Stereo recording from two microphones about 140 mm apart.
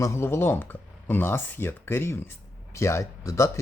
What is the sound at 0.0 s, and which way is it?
Speech, 20° left (ahead or behind).